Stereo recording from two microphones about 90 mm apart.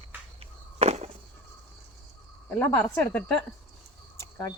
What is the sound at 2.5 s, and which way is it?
Speech, 15° left (ahead or behind).